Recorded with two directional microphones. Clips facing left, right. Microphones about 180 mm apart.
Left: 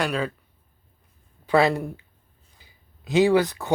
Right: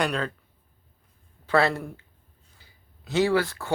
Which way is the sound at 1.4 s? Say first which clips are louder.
Left 3 dB; 15° left (ahead or behind).